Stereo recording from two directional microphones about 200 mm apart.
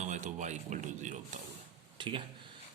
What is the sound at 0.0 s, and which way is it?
Speech, 35° right (ahead or behind).